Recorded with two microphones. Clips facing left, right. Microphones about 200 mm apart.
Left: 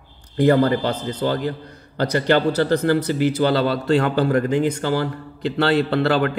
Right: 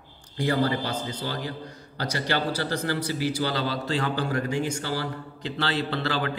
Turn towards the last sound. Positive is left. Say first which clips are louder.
# left 9 dB
turn(degrees=60)  # may be behind; listen again after turning